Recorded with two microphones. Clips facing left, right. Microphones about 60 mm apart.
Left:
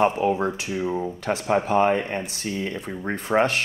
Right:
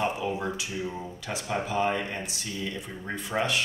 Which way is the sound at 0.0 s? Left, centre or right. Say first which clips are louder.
Left 8 dB; left.